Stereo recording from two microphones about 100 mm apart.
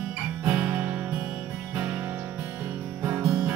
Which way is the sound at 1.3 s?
10° right (ahead or behind).